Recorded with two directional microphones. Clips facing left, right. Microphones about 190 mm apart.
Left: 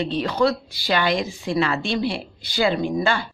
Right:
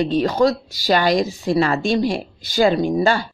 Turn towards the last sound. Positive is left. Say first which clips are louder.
# right 4 dB
turn(degrees=-40)  # may be behind; listen again after turning